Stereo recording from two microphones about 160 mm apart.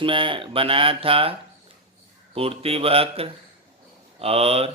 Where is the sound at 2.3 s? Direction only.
35° right (ahead or behind).